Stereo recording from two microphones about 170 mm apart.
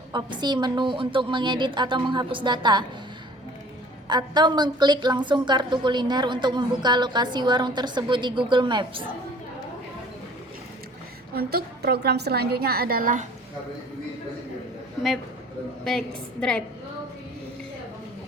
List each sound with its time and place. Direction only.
0.1 s a woman's voice: 25° right (ahead or behind)
4.1 s a woman's voice: 25° right (ahead or behind)
11.3 s a woman's voice: 70° right (ahead or behind)
15.8 s a woman's voice: 5° left (ahead or behind)